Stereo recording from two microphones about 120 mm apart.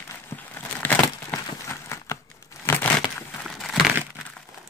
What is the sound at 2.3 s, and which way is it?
Crumpling, 20° left (ahead or behind).